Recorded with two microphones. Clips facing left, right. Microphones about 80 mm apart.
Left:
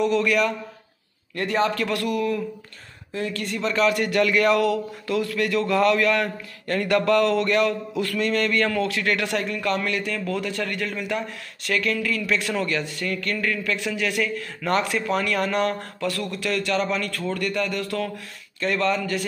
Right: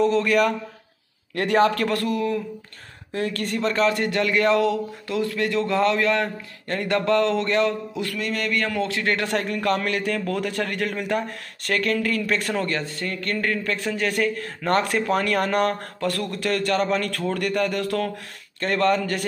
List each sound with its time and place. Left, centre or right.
0.0 s a man's voice: right
1.3 s a man's voice: right
1.9 s a man's voice: right
3.1 s a man's voice: right
8.1 s speech: centre
8.7 s a man's voice: right